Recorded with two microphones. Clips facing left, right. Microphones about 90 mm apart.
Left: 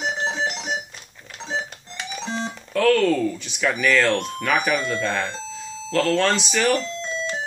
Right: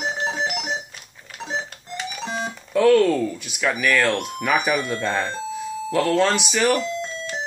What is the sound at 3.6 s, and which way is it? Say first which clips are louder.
Speech: even; 5° right (ahead or behind).